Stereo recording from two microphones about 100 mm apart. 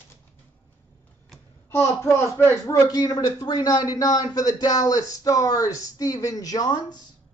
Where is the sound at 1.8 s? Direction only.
25° left (ahead or behind).